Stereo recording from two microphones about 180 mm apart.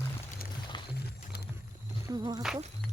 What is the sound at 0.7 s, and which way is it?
Music, 25° left (ahead or behind).